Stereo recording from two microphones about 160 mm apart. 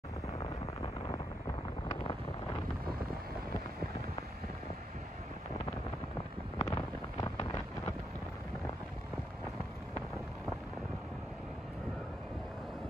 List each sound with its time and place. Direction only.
6.6 s wind noise: 20° left (ahead or behind)